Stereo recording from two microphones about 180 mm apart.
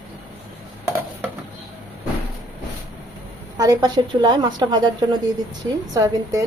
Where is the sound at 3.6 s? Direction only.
20° right (ahead or behind).